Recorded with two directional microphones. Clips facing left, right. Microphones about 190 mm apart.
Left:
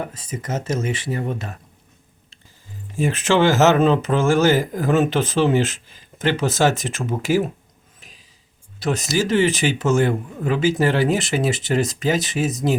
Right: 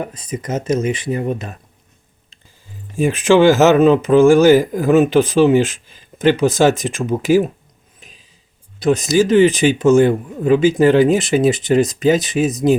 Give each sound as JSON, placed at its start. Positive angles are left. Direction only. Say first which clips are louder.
{"t": 0.0, "sound": "speech", "louder": "right 4 dB", "side_deg": -15}
{"t": 2.9, "sound": "speech", "louder": "right 6 dB", "side_deg": -15}
{"t": 8.0, "sound": "a sound", "louder": "right 3 dB", "side_deg": -15}
{"t": 8.8, "sound": "speech", "louder": "right 7 dB", "side_deg": -20}